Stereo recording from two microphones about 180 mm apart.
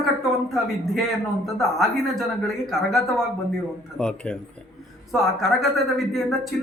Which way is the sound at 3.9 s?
5° left (ahead or behind).